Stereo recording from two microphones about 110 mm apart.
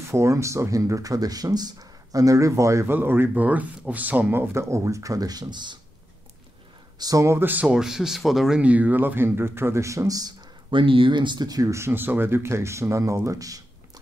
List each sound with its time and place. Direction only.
0.0 s speech: 25° right (ahead or behind); by 5.8 s 45° right (ahead or behind)
7.0 s speech: 30° right (ahead or behind)
7.6 s speech: 5° right (ahead or behind); by 13.6 s 30° right (ahead or behind)